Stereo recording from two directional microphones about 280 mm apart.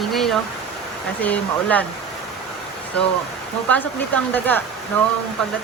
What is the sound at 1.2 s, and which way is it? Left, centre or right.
Speech, centre.